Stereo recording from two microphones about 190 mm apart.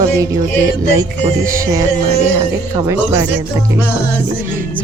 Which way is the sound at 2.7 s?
15° right (ahead or behind).